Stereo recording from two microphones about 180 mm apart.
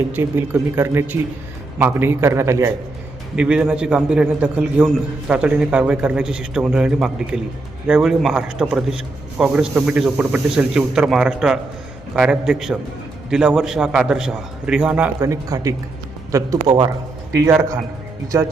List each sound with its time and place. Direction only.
0.1 s a man's voice: 15° right (ahead or behind)
17.3 s speech: 15° right (ahead or behind)